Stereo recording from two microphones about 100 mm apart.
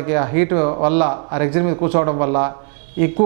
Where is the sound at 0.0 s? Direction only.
15° right (ahead or behind).